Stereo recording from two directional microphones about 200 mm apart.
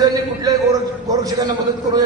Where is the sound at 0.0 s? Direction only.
20° right (ahead or behind).